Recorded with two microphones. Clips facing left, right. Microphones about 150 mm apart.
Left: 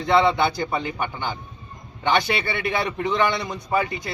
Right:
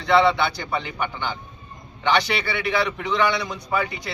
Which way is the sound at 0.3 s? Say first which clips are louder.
Left 2 dB; 45° left (ahead or behind).